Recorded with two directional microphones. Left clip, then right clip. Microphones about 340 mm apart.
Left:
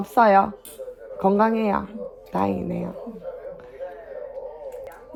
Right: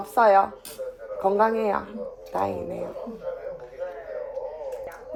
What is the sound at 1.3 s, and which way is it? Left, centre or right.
Speech, centre.